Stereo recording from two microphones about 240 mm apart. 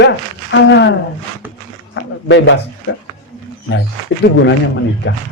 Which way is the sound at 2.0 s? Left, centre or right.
Left.